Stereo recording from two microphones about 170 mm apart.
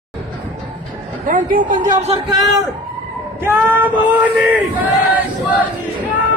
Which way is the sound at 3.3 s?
10° right (ahead or behind).